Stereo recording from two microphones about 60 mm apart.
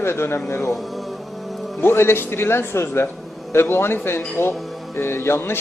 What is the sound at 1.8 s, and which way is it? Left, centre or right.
A man's voice, left.